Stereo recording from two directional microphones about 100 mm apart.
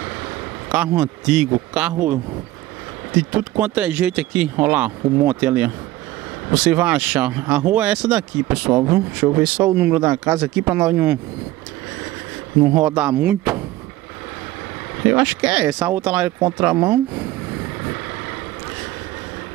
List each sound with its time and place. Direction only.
0.7 s speech: 15° right (ahead or behind)
3.2 s speech: 15° right (ahead or behind)
12.6 s speech: 15° right (ahead or behind)
15.0 s speech: 15° right (ahead or behind)